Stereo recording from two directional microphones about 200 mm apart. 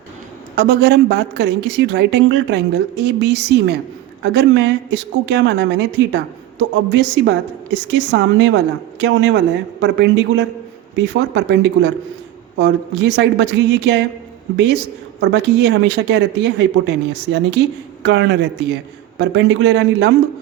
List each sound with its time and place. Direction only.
0.5 s speech: 55° right (ahead or behind)